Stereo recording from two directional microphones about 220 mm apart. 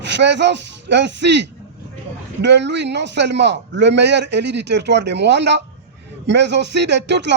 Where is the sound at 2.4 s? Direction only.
50° right (ahead or behind).